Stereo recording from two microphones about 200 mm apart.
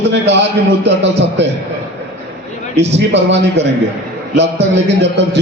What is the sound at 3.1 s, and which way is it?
Speech, 65° right (ahead or behind).